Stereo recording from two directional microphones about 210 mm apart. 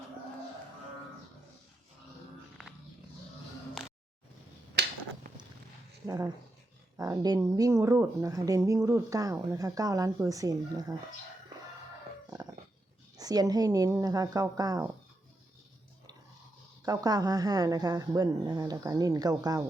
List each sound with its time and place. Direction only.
4.7 s a sound: 50° right (ahead or behind)
6.1 s speech: 15° right (ahead or behind)
13.1 s speech: 20° right (ahead or behind)
16.8 s speech: 15° right (ahead or behind)